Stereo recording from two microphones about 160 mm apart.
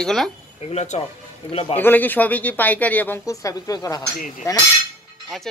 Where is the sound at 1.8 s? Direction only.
10° left (ahead or behind).